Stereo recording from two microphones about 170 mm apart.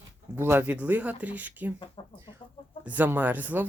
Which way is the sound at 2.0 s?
30° left (ahead or behind).